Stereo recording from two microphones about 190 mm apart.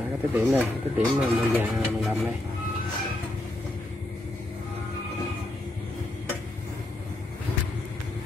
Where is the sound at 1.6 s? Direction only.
5° right (ahead or behind).